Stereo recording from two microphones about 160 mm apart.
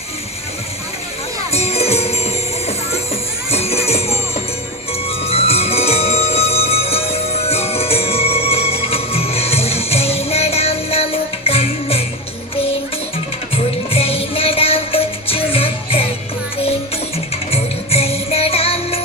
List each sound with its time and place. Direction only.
1.5 s music: 40° left (ahead or behind)
13.9 s music: 35° left (ahead or behind)
17.5 s music: 40° left (ahead or behind)